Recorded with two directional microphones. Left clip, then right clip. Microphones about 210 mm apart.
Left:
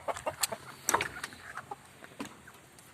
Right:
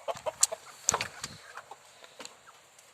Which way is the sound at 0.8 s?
20° right (ahead or behind).